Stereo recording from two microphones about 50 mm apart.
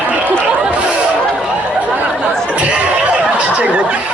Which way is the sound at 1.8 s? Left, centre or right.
Right.